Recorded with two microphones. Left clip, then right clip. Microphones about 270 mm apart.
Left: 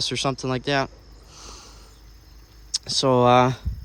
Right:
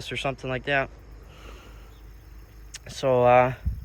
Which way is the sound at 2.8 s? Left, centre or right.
Centre.